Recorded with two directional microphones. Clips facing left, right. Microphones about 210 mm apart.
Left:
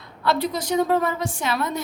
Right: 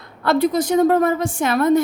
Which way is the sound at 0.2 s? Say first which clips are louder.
Right 6 dB; 50° right (ahead or behind).